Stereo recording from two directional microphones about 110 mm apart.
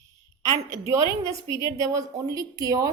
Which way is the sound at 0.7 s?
30° right (ahead or behind).